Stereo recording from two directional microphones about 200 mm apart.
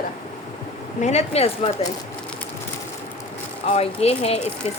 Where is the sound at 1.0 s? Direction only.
35° left (ahead or behind).